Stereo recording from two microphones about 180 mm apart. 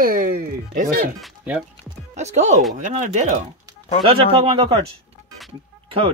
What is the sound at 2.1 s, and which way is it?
Speech, 40° right (ahead or behind).